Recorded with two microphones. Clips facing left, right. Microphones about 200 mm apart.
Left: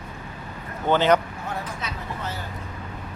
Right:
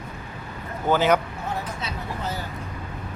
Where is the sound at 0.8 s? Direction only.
5° right (ahead or behind).